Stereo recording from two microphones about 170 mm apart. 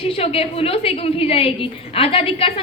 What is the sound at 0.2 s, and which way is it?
A woman's voice, 35° left (ahead or behind).